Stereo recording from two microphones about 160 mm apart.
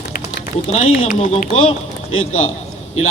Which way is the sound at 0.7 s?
50° left (ahead or behind).